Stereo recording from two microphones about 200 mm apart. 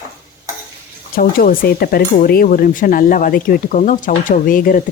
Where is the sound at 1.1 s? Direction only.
45° left (ahead or behind).